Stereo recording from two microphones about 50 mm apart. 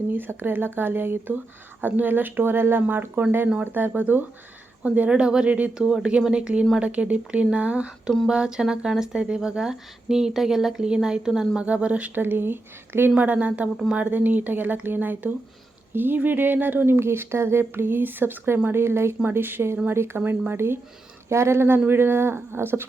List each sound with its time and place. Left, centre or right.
0.1 s speech: right; by 11.6 s centre
11.6 s speech: right
12.2 s speech: right
13.1 s speech: right
18.7 s speech: right
19.3 s speech: right
21.2 s speech: right